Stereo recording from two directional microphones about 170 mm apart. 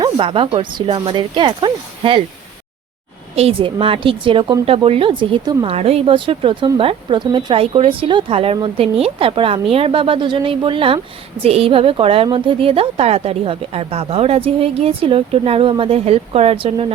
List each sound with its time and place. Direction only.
0.0 s speech: 30° right (ahead or behind)
3.3 s a woman's voice: 35° right (ahead or behind)